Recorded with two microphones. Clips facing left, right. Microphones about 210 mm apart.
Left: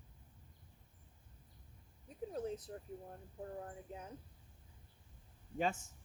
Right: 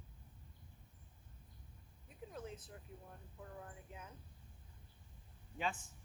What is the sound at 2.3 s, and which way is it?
Speech, 35° left (ahead or behind).